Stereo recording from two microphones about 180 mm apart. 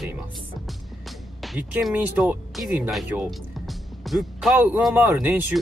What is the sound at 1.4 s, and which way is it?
Speech, centre (ahead or behind).